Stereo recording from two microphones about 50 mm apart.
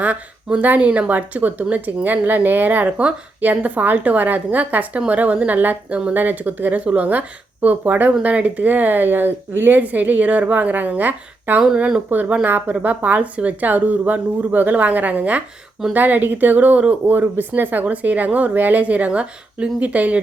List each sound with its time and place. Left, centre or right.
0.6 s speech: right